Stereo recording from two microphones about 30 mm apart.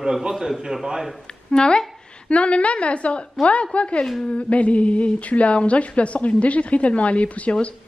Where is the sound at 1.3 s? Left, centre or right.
Left.